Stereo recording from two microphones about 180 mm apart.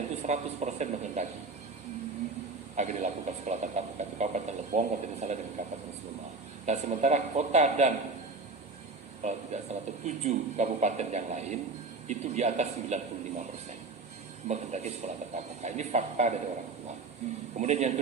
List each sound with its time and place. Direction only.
0.2 s speech: 40° right (ahead or behind)
2.7 s speech: 40° right (ahead or behind)
6.7 s speech: 40° right (ahead or behind)
9.2 s speech: 40° right (ahead or behind)
14.4 s speech: 40° right (ahead or behind)